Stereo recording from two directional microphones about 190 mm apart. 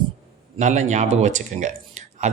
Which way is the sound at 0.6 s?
40° right (ahead or behind).